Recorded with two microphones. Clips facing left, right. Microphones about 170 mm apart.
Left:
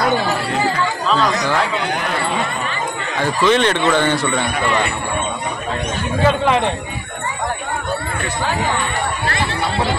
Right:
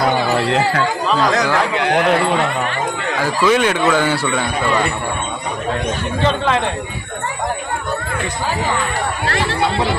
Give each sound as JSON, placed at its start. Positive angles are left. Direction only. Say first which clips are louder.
{"t": 0.5, "sound": "speech", "louder": "right 3 dB", "side_deg": -80}
{"t": 1.9, "sound": "a man's voice", "louder": "right 8 dB", "side_deg": -90}
{"t": 3.2, "sound": "speech", "louder": "even", "side_deg": -5}
{"t": 6.2, "sound": "speech", "louder": "left 2 dB", "side_deg": 15}